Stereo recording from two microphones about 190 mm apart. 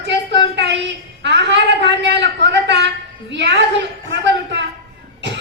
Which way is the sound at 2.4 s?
60° right (ahead or behind).